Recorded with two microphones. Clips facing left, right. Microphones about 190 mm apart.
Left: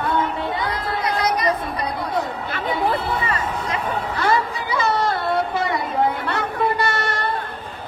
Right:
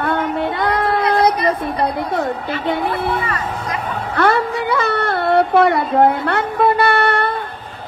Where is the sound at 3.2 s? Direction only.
25° left (ahead or behind).